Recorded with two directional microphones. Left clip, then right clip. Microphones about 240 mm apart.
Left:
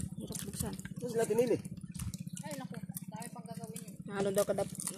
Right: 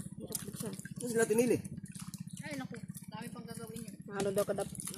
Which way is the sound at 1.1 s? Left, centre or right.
Right.